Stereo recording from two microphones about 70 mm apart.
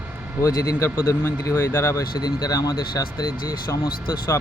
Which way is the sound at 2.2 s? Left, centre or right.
Left.